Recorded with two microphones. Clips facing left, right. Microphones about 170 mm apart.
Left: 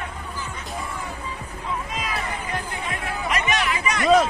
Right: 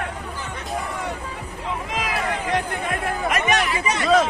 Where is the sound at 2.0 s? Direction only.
80° right; by 4.0 s 35° right (ahead or behind).